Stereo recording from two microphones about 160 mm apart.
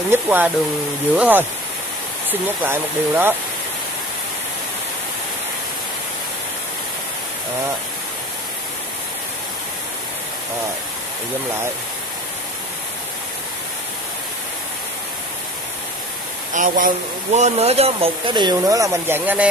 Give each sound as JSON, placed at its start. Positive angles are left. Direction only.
{"t": 0.1, "sound": "speech", "side_deg": -10}
{"t": 2.4, "sound": "speech", "side_deg": -10}
{"t": 16.5, "sound": "speech", "side_deg": -55}